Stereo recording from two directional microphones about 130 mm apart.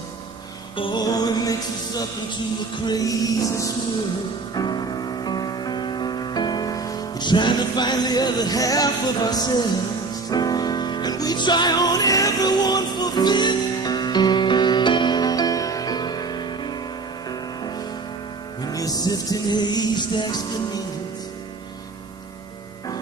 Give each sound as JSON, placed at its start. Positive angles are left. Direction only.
{"t": 0.7, "sound": "music", "side_deg": 35}